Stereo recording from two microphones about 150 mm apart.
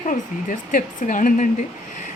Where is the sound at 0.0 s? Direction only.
60° left (ahead or behind).